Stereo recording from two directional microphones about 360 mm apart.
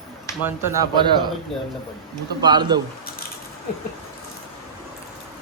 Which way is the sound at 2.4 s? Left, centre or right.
Centre.